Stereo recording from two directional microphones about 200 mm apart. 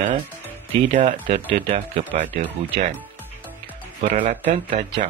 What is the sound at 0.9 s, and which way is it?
Speech, 35° right (ahead or behind).